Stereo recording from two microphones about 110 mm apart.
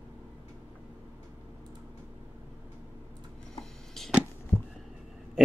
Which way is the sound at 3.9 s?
Centre (ahead or behind).